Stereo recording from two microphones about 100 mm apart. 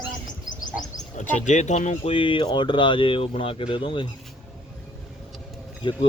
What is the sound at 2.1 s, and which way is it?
Speech, 55° left (ahead or behind).